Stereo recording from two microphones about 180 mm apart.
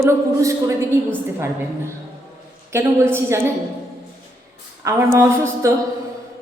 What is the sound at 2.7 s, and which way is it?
Speech, 15° right (ahead or behind).